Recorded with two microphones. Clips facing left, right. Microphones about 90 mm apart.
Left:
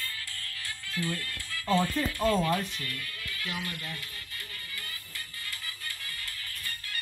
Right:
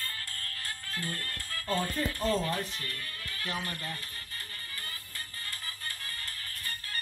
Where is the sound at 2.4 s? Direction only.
30° right (ahead or behind).